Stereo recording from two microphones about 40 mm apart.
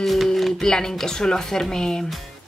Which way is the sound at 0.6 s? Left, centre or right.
Centre.